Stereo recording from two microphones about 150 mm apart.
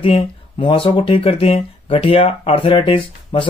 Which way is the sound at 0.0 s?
35° left (ahead or behind).